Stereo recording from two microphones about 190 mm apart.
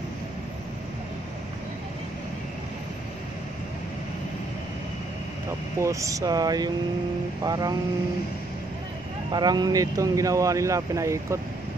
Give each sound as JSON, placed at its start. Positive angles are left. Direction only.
{"t": 5.8, "sound": "speech", "side_deg": -15}
{"t": 9.3, "sound": "speech", "side_deg": -20}